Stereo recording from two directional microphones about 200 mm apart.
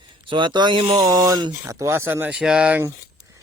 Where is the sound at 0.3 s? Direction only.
25° right (ahead or behind).